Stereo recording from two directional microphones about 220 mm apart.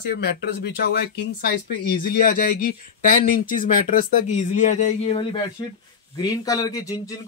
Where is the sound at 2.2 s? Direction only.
40° left (ahead or behind).